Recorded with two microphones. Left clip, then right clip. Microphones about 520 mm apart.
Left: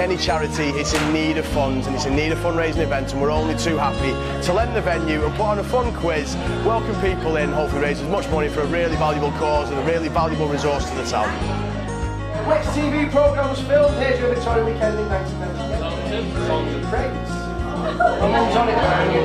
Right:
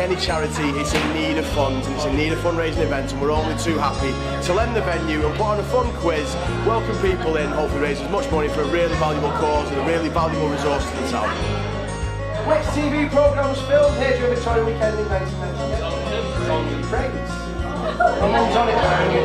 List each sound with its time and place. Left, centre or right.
0.0 s speech: left
7.1 s speech: left
12.4 s music: centre
16.4 s speech: centre
17.9 s music: centre